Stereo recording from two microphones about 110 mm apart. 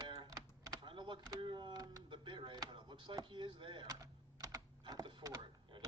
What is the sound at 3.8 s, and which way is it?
Typing, 35° right (ahead or behind).